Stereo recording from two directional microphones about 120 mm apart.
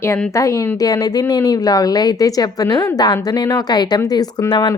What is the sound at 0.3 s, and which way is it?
A woman's voice, 25° left (ahead or behind).